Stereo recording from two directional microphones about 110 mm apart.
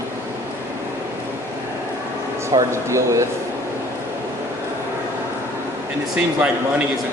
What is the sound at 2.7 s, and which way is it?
Speech, 25° right (ahead or behind).